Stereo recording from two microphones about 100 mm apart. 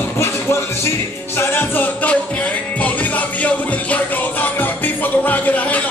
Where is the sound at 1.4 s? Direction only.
20° left (ahead or behind).